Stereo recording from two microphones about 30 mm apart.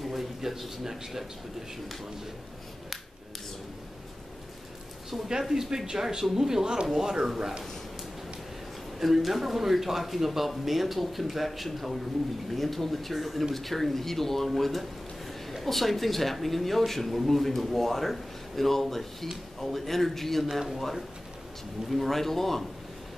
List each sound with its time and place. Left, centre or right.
0.0 s a sound: centre
0.4 s a man's voice: centre
5.1 s a man's voice: centre
9.0 s a man's voice: centre